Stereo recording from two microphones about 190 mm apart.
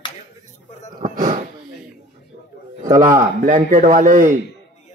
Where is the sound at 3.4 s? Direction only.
45° right (ahead or behind).